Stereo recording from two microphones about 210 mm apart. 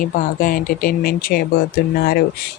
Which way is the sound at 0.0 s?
40° left (ahead or behind).